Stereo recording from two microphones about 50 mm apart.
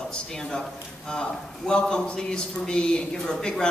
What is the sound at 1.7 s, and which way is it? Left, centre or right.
Speech, centre.